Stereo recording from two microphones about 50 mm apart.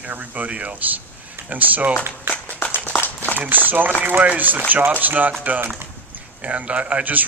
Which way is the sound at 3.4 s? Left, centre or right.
Right.